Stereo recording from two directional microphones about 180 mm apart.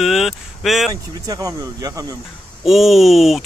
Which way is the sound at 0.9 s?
20° right (ahead or behind).